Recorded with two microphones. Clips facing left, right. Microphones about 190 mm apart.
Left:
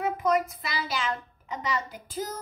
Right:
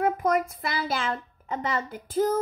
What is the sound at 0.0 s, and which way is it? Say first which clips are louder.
A woman's voice: right 2 dB; 55° right (ahead or behind).